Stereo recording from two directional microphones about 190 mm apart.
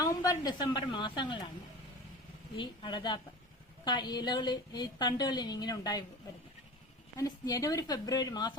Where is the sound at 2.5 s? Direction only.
25° left (ahead or behind).